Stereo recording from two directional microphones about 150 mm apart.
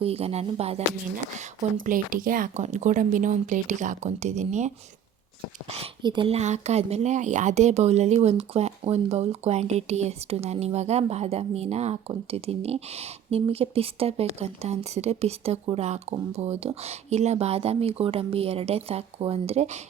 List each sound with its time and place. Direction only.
0.0 s speech: 40° right (ahead or behind)
1.4 s speech: 65° right (ahead or behind)
5.6 s speech: 40° right (ahead or behind)